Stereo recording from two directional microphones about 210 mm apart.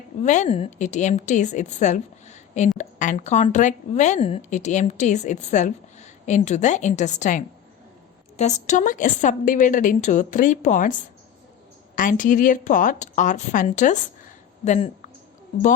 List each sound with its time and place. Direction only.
0.2 s a woman's voice: 35° left (ahead or behind)
11.9 s a woman's voice: 40° left (ahead or behind)